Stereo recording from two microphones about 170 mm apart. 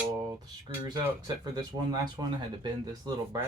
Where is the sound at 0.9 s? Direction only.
20° right (ahead or behind).